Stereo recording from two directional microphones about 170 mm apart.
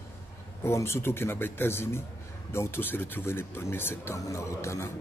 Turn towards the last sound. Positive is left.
turn(degrees=15)  # may be behind; listen again after turning